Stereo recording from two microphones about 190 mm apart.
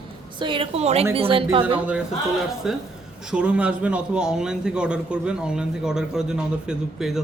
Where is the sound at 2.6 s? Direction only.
5° right (ahead or behind).